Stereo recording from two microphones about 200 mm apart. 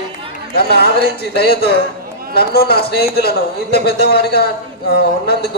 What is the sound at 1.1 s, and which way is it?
A man's voice, 50° left (ahead or behind).